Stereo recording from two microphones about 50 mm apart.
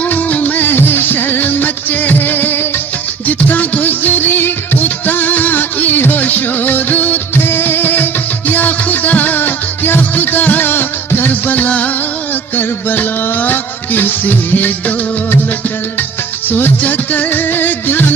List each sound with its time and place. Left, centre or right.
0.0 s music: left
3.2 s music: left
16.5 s music: left